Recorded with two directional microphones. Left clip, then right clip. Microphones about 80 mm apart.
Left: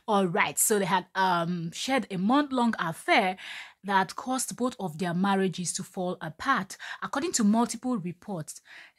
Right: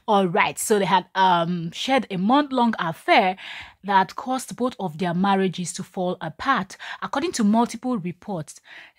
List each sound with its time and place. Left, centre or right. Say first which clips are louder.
0.0 s a woman's voice: right 6 dB; right